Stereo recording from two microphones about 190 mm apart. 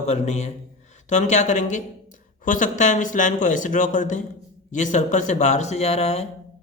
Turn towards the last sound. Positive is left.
turn(degrees=35)  # may be behind; listen again after turning